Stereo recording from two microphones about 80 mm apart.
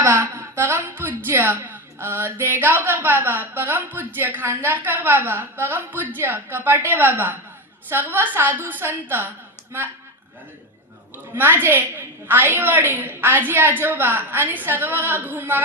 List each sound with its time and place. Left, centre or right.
0.0 s speech: right
11.3 s speech: right